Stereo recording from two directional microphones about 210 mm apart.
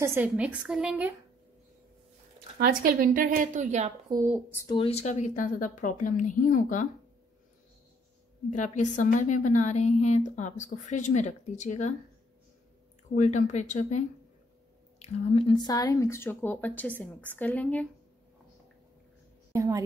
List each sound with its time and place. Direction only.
0.0 s a woman's voice: 10° right (ahead or behind)
2.5 s speech: 45° right (ahead or behind)
4.1 s speech: 15° right (ahead or behind)
4.5 s speech: 15° left (ahead or behind)
4.7 s a woman's voice: 30° left (ahead or behind)
8.5 s a woman's voice: 35° left (ahead or behind)
13.1 s a woman's voice: 35° left (ahead or behind); by 17.8 s 5° left (ahead or behind)
19.5 s a woman's voice: 15° right (ahead or behind)